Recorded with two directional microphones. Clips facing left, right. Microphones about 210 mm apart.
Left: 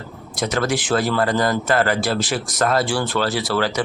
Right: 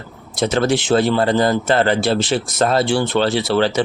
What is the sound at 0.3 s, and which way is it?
A man's voice, 25° right (ahead or behind).